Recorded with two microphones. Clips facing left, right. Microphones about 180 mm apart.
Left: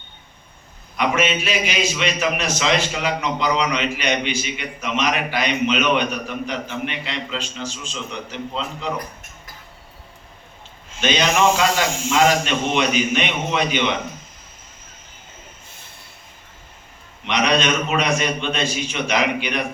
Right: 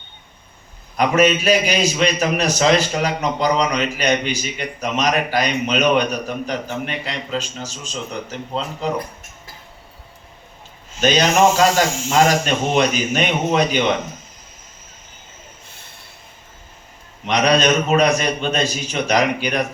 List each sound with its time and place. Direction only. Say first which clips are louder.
0.9 s a man's voice: right 5 dB; 40° right (ahead or behind)
11.0 s a man's voice: right 3 dB; 40° right (ahead or behind)
17.2 s a man's voice: right 4 dB; 40° right (ahead or behind)